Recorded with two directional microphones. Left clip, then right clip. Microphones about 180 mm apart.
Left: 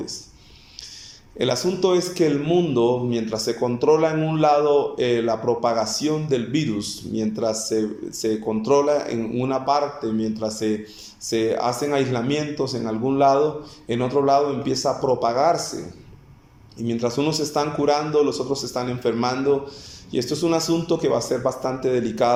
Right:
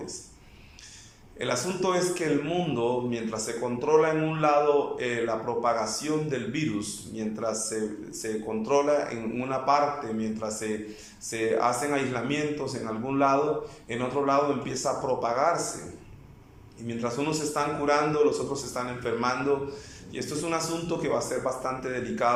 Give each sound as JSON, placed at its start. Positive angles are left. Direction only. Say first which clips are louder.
{"t": 1.4, "sound": "a man's voice", "louder": "left 7 dB", "side_deg": 25}
{"t": 16.7, "sound": "a man's voice", "louder": "left 7 dB", "side_deg": 25}